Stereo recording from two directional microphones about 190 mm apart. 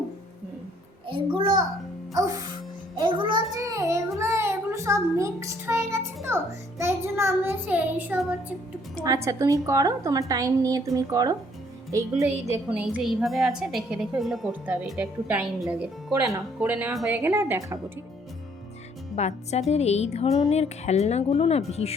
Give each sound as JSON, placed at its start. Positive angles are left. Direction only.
{"t": 1.0, "sound": "a sound", "side_deg": -25}
{"t": 2.1, "sound": "a woman's voice", "side_deg": -20}
{"t": 19.1, "sound": "speech", "side_deg": 35}